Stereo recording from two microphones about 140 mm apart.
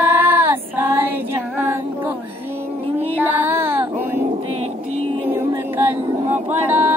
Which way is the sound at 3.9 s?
15° right (ahead or behind).